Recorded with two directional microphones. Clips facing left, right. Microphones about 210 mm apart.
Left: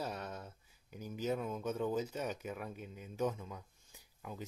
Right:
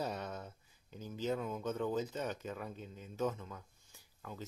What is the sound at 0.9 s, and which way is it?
Speech, 10° left (ahead or behind).